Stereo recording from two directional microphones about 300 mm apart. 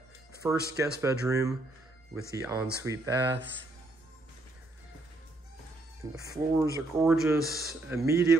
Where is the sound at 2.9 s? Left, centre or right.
Right.